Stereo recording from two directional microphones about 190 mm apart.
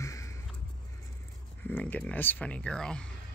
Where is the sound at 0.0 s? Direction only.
15° left (ahead or behind).